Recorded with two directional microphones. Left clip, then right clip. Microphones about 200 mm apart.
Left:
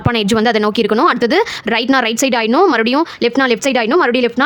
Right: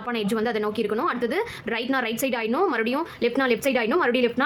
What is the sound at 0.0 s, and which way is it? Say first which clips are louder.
Speech: left 11 dB; 55° left (ahead or behind).